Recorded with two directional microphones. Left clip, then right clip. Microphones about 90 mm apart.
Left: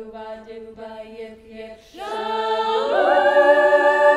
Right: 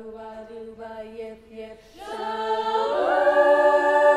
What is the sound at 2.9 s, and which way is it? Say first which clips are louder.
A capella: left 5 dB; 40° left (ahead or behind).